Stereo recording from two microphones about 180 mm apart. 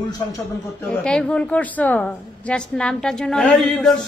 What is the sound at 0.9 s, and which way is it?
Speech, 5° left (ahead or behind).